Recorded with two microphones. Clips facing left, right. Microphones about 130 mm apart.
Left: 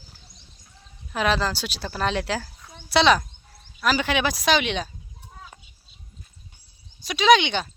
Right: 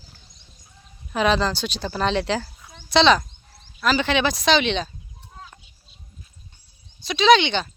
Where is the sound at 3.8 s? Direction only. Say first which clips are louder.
Right 2 dB; 10° left (ahead or behind).